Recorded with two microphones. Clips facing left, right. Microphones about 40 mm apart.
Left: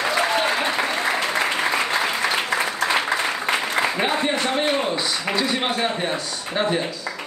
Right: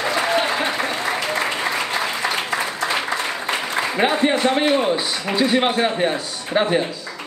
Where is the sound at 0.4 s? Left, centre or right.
Centre.